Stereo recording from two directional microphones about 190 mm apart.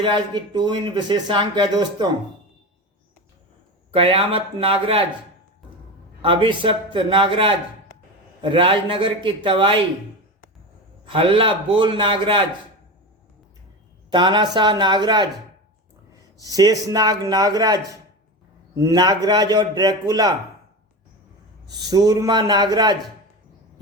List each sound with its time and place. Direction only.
0.0 s speech: 25° right (ahead or behind)
3.9 s speech: 30° right (ahead or behind)
6.2 s speech: 25° right (ahead or behind)
11.0 s speech: 25° right (ahead or behind)
14.1 s speech: 25° right (ahead or behind)
16.4 s speech: 20° right (ahead or behind)
21.7 s speech: 20° right (ahead or behind)